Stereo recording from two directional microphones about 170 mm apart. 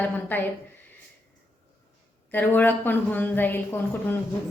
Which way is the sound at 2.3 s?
10° left (ahead or behind).